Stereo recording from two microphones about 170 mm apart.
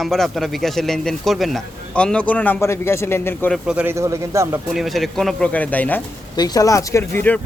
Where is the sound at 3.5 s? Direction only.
5° right (ahead or behind).